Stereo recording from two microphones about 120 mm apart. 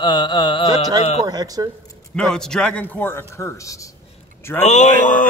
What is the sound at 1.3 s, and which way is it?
Speech, 30° right (ahead or behind).